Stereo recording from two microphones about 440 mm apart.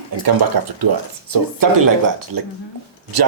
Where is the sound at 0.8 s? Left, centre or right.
Right.